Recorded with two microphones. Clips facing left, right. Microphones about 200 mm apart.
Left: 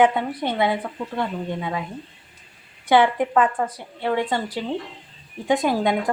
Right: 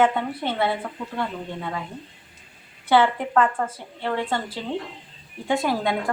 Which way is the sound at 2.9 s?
15° left (ahead or behind).